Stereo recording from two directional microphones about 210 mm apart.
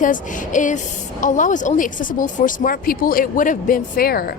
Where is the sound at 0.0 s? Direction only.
40° left (ahead or behind).